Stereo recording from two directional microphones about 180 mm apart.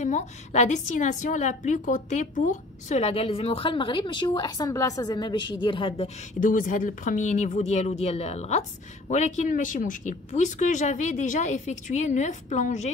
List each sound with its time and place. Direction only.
0.0 s a woman's voice: 40° left (ahead or behind)
6.4 s a woman's voice: 45° left (ahead or behind)